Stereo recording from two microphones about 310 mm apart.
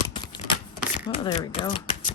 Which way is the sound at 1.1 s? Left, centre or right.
Centre.